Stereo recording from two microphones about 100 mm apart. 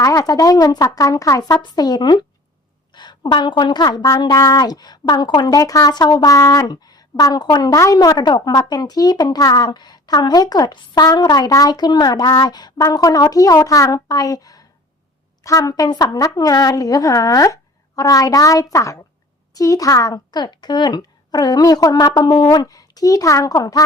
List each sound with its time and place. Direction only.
0.0 s a woman's voice: 35° left (ahead or behind)
1.5 s a woman's voice: 45° left (ahead or behind)
6.3 s a woman's voice: 35° left (ahead or behind)